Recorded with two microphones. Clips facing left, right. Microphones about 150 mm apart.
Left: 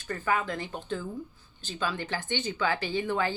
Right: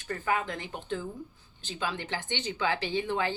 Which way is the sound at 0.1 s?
20° right (ahead or behind).